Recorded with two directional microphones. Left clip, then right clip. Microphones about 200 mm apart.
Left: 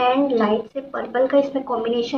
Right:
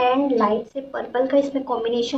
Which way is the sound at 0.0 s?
10° right (ahead or behind).